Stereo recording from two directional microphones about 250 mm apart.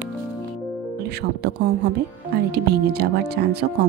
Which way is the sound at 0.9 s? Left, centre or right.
Right.